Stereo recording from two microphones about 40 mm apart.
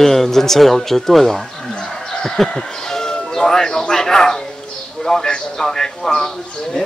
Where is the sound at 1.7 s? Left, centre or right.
Centre.